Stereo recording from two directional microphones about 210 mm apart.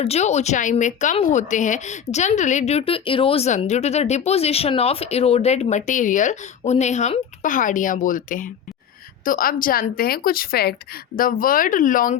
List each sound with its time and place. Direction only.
0.0 s speech: 30° left (ahead or behind)